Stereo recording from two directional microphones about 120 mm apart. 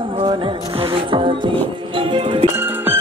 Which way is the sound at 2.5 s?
15° right (ahead or behind).